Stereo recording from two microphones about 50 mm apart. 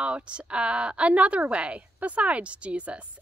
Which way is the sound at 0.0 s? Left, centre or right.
Right.